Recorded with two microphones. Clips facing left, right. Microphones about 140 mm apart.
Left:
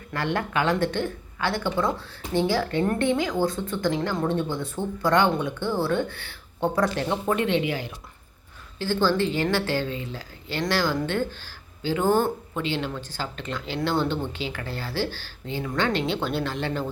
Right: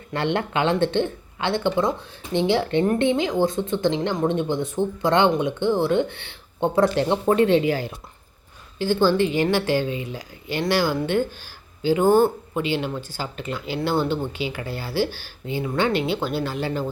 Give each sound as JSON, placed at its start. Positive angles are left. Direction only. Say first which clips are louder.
{"t": 0.1, "sound": "a woman's voice", "louder": "right 3 dB", "side_deg": -25}
{"t": 8.8, "sound": "speech", "louder": "right 4 dB", "side_deg": -15}